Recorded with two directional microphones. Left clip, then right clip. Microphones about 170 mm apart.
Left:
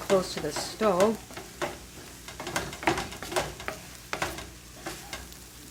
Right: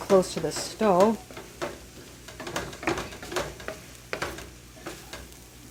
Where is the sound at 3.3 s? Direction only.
10° left (ahead or behind).